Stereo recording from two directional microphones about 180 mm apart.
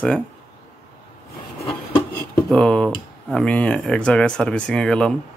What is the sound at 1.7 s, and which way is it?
Rub, 30° left (ahead or behind).